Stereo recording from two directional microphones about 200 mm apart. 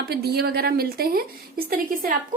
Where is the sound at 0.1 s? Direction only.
55° right (ahead or behind).